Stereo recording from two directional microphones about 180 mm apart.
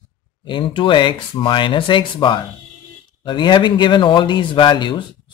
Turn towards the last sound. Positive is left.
turn(degrees=25)  # may be behind; listen again after turning